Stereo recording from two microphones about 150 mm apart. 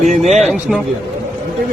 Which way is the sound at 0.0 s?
55° right (ahead or behind).